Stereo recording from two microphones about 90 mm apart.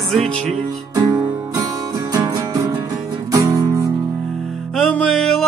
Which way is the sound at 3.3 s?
40° right (ahead or behind).